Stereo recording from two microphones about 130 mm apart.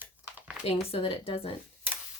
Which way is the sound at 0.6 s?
45° left (ahead or behind).